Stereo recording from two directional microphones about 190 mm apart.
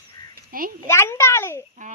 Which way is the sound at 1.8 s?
40° right (ahead or behind).